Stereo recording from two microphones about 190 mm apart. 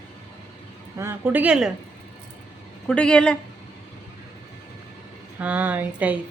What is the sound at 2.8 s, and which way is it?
Speech, 5° left (ahead or behind).